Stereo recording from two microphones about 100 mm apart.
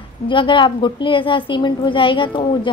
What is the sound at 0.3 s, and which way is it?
A woman's voice, 55° left (ahead or behind).